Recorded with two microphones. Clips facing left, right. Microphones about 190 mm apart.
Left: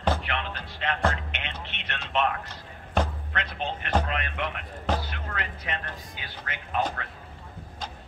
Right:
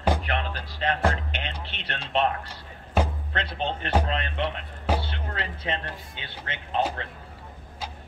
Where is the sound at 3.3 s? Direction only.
30° right (ahead or behind).